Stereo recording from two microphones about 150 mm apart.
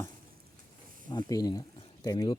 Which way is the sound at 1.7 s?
25° left (ahead or behind).